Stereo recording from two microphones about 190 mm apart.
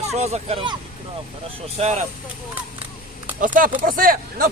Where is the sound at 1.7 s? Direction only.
35° right (ahead or behind).